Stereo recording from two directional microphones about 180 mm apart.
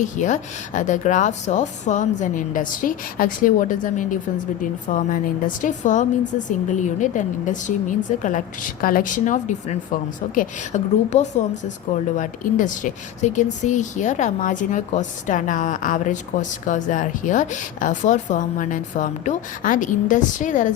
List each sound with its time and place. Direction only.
0.0 s speech: 45° left (ahead or behind)